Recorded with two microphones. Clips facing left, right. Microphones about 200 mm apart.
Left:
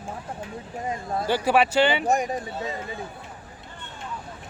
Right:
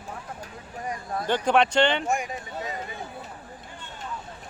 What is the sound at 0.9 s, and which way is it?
Speech, 25° left (ahead or behind).